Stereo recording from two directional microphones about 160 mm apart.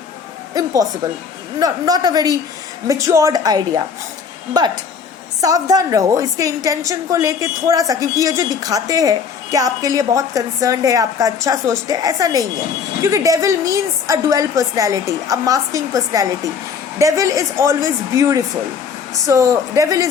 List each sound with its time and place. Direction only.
0.5 s a woman's voice: 20° right (ahead or behind)